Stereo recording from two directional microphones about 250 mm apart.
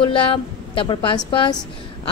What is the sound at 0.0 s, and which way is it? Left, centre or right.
A woman's voice, left.